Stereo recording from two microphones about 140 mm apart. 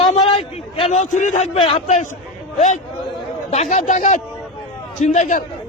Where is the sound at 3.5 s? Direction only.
55° left (ahead or behind).